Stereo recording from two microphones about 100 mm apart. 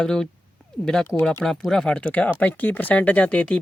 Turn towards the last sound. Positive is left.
turn(degrees=15)  # may be behind; listen again after turning